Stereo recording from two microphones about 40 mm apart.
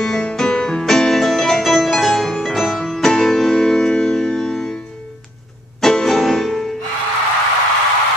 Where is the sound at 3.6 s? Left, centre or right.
Centre.